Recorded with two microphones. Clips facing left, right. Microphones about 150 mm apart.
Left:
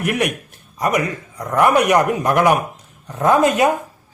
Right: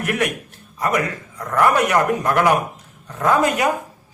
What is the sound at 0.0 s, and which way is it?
A man's voice, 15° left (ahead or behind).